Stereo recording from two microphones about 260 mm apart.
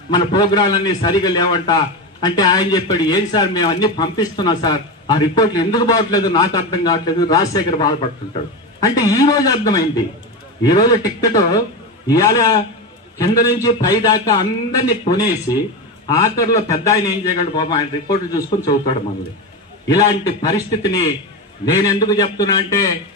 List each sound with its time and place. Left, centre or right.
0.1 s speech: centre
20.4 s speech: centre